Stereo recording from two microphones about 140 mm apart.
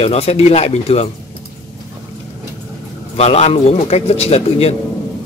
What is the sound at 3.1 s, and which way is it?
Speech, 50° left (ahead or behind).